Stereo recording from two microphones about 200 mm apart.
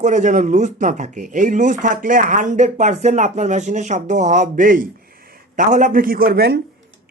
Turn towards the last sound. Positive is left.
turn(degrees=-55)  # may be behind; listen again after turning